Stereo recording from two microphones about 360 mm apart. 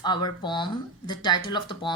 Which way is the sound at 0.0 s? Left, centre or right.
Centre.